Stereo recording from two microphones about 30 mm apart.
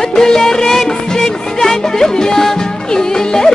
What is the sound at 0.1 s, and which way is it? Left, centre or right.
Music, left.